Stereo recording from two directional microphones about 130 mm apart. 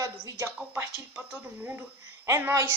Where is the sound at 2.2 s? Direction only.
25° right (ahead or behind).